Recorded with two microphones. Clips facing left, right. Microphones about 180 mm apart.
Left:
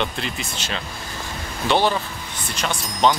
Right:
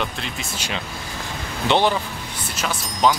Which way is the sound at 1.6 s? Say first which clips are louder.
Right 1 dB; 20° right (ahead or behind).